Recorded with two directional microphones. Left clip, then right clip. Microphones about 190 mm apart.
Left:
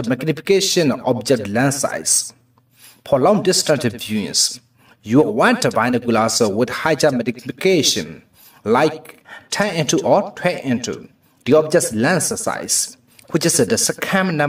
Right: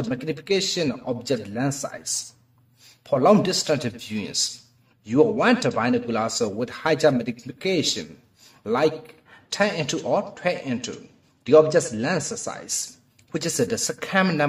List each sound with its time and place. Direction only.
0.0 s a man's voice: 40° left (ahead or behind)